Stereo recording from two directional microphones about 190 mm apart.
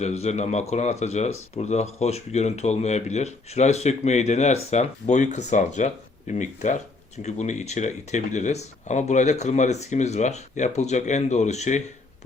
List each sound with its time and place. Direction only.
0.0 s speech: 35° left (ahead or behind)